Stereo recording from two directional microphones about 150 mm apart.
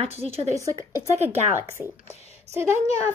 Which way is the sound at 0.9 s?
15° right (ahead or behind).